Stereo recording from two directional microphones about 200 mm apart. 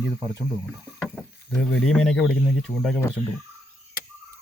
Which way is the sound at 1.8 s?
Centre (ahead or behind).